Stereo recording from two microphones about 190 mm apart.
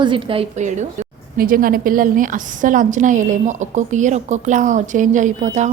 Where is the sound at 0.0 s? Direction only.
25° right (ahead or behind).